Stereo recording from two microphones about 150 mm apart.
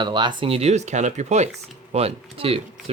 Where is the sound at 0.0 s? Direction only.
30° right (ahead or behind).